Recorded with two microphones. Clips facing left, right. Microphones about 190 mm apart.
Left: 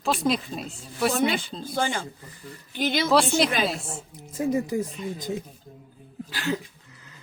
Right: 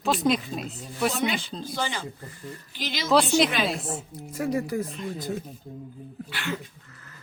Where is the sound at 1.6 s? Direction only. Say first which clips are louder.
Left 3 dB; 50° left (ahead or behind).